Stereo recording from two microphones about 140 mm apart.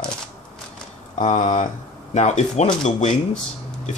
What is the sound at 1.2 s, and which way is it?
Speech, 50° left (ahead or behind).